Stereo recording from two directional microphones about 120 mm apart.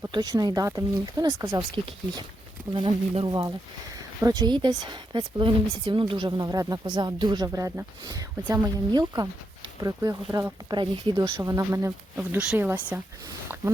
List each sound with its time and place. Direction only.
0.1 s speech: 30° right (ahead or behind)
12.1 s speech: 10° right (ahead or behind)